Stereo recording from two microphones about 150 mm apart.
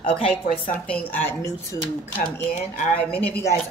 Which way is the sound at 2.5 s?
55° left (ahead or behind).